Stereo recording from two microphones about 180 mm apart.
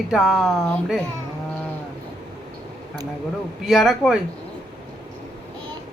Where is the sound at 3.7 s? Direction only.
Centre (ahead or behind).